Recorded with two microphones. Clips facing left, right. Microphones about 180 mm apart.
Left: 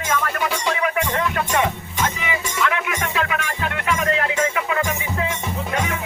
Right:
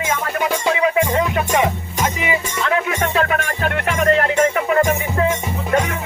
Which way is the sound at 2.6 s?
35° right (ahead or behind).